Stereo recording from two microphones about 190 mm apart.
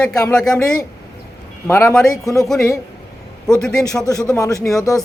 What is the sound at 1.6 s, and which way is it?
Speech, 15° left (ahead or behind).